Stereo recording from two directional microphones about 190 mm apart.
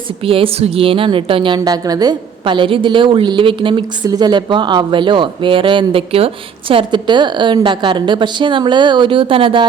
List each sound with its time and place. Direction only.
0.3 s a woman's voice: 30° right (ahead or behind)